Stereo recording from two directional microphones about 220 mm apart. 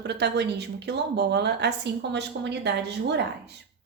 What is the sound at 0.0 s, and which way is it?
Speech, 50° right (ahead or behind).